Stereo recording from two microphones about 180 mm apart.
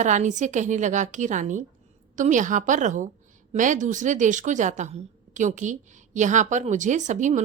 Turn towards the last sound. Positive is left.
turn(degrees=-45)  # may be behind; listen again after turning